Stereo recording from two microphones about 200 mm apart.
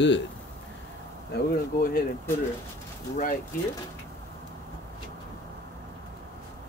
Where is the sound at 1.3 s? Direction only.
45° left (ahead or behind).